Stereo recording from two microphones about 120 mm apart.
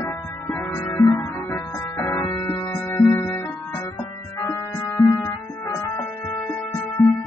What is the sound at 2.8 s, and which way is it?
Music, 25° left (ahead or behind).